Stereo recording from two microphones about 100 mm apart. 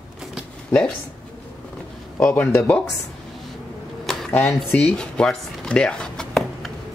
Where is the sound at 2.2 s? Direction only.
20° left (ahead or behind).